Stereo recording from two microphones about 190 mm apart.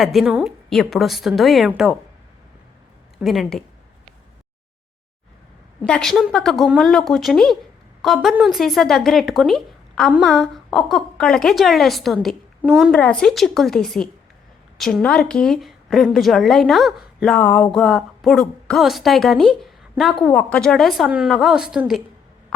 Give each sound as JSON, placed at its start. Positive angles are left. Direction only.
{"t": 0.0, "sound": "a woman's voice", "side_deg": 0}
{"t": 3.2, "sound": "a woman's voice", "side_deg": 0}
{"t": 5.8, "sound": "a woman's voice", "side_deg": 5}